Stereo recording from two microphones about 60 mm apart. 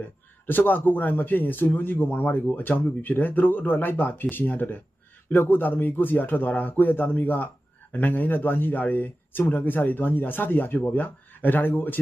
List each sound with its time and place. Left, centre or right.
0.4 s speech: left